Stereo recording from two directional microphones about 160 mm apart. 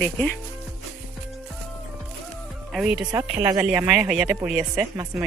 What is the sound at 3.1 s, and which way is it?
Speech, 20° right (ahead or behind).